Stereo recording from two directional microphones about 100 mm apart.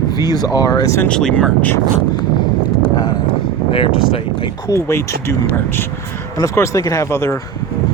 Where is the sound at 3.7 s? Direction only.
60° left (ahead or behind).